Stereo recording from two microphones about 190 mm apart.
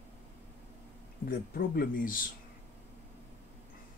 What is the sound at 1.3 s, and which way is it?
Speech, 50° left (ahead or behind).